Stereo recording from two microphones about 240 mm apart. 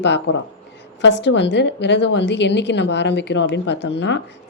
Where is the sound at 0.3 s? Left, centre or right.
Left.